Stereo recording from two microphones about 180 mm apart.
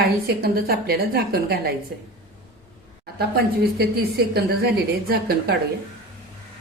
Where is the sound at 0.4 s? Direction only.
60° right (ahead or behind).